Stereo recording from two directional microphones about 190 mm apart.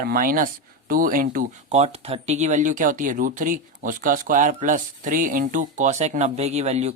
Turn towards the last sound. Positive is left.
turn(degrees=-35)  # may be behind; listen again after turning